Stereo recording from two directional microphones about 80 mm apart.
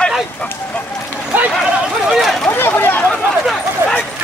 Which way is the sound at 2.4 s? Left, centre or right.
Left.